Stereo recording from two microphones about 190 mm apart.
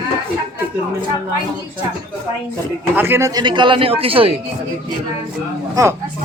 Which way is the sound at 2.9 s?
10° right (ahead or behind).